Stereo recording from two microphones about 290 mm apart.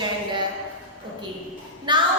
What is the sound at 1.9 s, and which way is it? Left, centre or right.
Child singing, centre.